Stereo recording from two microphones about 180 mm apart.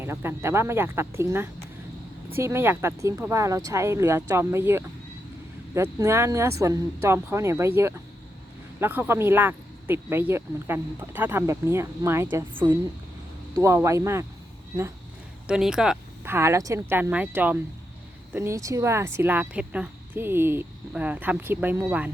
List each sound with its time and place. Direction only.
0.0 s speech: 15° right (ahead or behind)
15.4 s speech: 5° right (ahead or behind)